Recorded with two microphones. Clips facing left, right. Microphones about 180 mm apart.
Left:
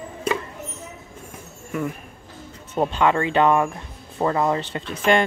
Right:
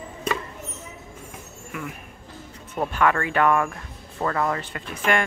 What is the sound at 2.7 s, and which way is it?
Speech, 20° left (ahead or behind).